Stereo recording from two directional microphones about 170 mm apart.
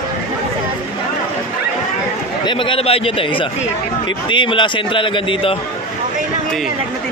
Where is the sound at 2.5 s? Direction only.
30° left (ahead or behind).